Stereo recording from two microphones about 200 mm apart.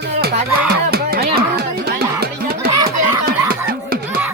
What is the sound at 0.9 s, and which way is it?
Music, 50° right (ahead or behind).